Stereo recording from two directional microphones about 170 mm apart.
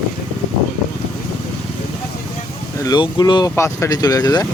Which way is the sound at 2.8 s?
25° left (ahead or behind).